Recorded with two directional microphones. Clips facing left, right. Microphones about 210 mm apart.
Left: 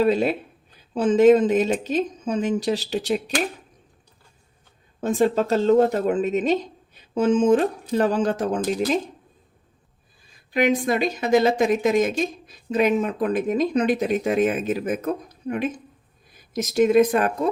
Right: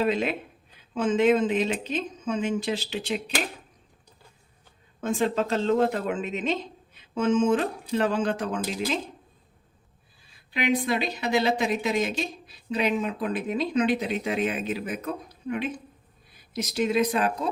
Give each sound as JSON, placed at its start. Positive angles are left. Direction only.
{"t": 0.0, "sound": "speech", "side_deg": 35}
{"t": 4.9, "sound": "speech", "side_deg": 35}
{"t": 10.5, "sound": "speech", "side_deg": 45}